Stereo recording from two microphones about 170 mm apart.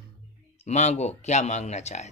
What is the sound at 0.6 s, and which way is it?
Speech, 40° left (ahead or behind).